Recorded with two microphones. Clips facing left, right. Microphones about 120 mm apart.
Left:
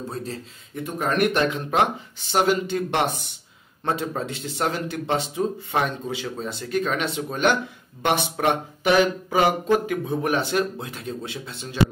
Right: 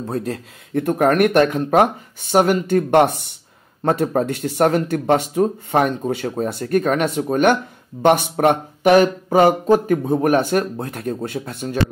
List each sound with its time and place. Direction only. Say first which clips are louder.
0.1 s speech: right 7 dB; 55° right (ahead or behind)